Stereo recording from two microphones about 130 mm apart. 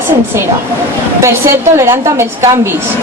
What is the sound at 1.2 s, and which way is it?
A woman's voice, 20° right (ahead or behind).